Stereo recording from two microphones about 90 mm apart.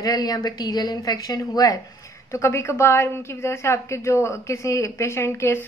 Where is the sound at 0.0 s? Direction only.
45° left (ahead or behind).